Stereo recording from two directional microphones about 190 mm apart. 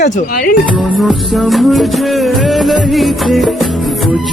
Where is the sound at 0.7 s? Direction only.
Centre (ahead or behind).